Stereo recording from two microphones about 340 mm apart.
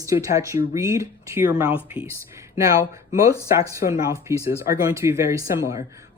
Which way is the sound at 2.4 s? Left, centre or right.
Centre.